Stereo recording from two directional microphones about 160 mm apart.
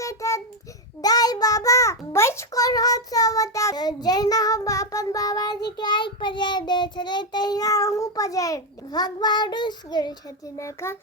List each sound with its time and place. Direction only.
0.0 s child singing: 20° left (ahead or behind)
1.0 s a child's voice: 25° left (ahead or behind)